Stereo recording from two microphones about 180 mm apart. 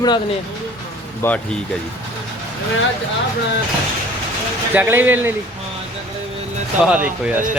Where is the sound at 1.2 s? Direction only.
15° left (ahead or behind).